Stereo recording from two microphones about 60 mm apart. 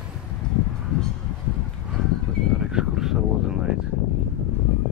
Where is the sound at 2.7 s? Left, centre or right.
Centre.